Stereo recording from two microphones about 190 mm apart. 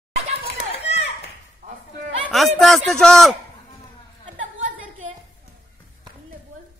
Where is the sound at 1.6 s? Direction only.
35° right (ahead or behind).